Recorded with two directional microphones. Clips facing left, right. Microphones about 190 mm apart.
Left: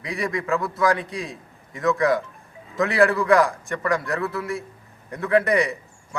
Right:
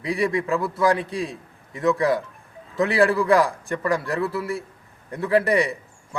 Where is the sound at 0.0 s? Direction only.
30° right (ahead or behind).